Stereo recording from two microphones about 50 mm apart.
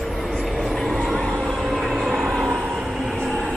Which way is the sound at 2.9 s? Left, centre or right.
Centre.